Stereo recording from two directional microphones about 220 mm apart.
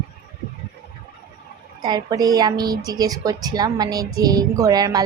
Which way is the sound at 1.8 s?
15° right (ahead or behind).